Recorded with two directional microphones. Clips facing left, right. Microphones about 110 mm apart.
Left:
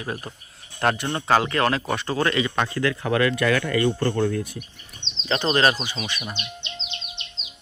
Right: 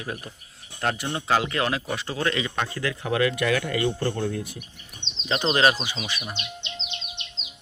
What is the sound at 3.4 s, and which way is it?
Speech, 50° left (ahead or behind).